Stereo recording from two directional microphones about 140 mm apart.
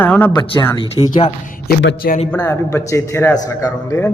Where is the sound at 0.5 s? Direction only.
25° left (ahead or behind).